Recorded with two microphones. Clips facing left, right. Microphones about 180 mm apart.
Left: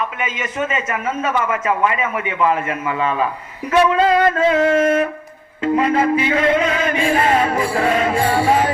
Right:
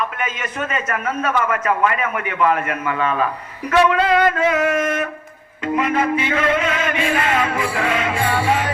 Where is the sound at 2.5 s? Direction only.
25° left (ahead or behind).